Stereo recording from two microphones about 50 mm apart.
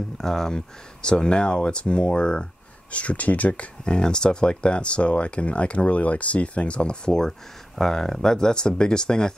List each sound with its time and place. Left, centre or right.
0.2 s speech: centre; by 3.6 s left
3.8 s speech: centre
7.1 s speech: centre